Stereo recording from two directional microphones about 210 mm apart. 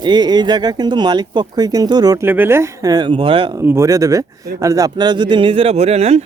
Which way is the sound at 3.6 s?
10° right (ahead or behind).